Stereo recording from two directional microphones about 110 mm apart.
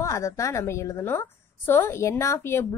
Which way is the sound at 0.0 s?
25° left (ahead or behind).